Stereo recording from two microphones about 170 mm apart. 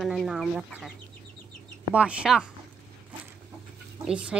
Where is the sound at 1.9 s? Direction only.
5° right (ahead or behind).